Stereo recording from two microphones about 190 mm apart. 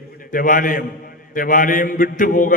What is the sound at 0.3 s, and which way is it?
A man's voice, 45° left (ahead or behind).